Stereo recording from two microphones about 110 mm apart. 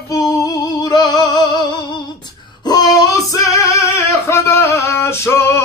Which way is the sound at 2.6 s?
35° left (ahead or behind).